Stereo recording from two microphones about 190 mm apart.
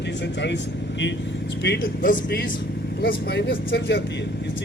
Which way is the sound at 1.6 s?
60° left (ahead or behind).